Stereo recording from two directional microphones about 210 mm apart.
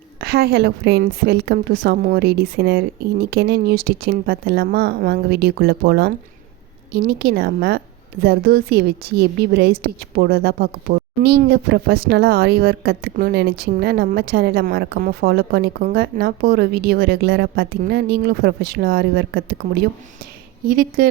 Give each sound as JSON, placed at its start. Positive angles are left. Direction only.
{"t": 0.2, "sound": "a woman's voice", "side_deg": -50}
{"t": 20.7, "sound": "a woman's voice", "side_deg": -45}